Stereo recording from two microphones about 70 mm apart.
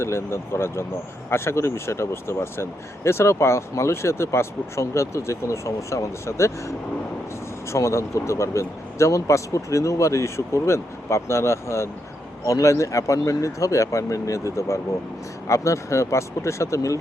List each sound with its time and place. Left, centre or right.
0.0 s speech: left